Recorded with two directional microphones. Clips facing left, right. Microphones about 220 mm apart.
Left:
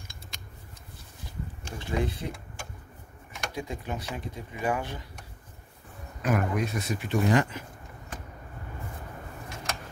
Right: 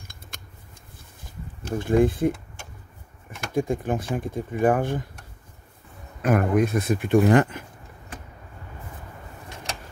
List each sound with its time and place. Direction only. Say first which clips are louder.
1.8 s speech: right 11 dB; 50° right (ahead or behind)
6.2 s speech: right 7 dB; 55° right (ahead or behind)